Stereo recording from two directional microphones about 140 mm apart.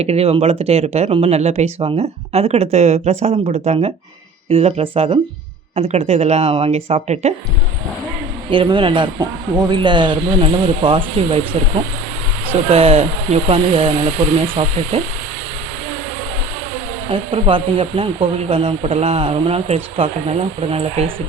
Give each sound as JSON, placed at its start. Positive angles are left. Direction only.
{"t": 0.0, "sound": "speech", "side_deg": -50}
{"t": 5.7, "sound": "speech", "side_deg": -50}
{"t": 8.4, "sound": "speech", "side_deg": -35}
{"t": 12.7, "sound": "speech", "side_deg": -45}
{"t": 17.1, "sound": "speech", "side_deg": -40}